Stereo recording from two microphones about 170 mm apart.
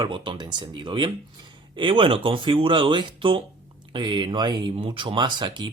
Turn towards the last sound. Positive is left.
turn(degrees=-25)  # may be behind; listen again after turning